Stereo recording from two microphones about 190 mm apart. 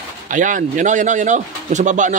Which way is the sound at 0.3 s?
45° right (ahead or behind).